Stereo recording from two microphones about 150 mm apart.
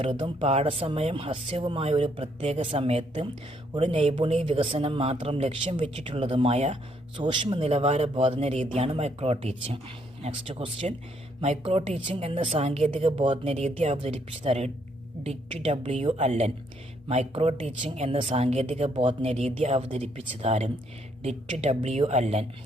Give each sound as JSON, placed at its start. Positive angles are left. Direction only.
{"t": 0.0, "sound": "a woman's voice", "side_deg": -35}
{"t": 7.2, "sound": "a woman's voice", "side_deg": -30}